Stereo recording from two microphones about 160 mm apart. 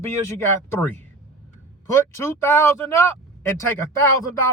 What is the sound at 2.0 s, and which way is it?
Speech, 15° left (ahead or behind).